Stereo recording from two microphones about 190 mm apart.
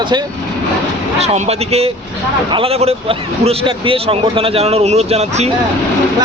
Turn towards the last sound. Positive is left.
turn(degrees=-35)  # may be behind; listen again after turning